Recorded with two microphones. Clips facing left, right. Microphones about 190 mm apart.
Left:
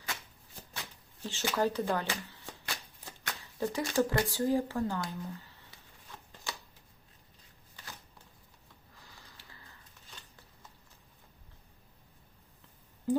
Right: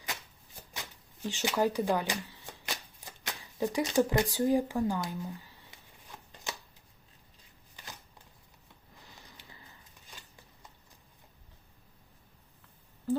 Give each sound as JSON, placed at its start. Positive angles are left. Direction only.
{"t": 0.7, "sound": "speech", "side_deg": -15}
{"t": 6.5, "sound": "shuffling cards", "side_deg": -20}
{"t": 9.0, "sound": "sniff", "side_deg": -20}
{"t": 13.1, "sound": "a sound", "side_deg": 15}